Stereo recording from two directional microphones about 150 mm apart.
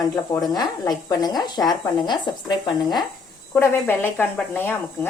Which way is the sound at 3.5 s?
15° left (ahead or behind).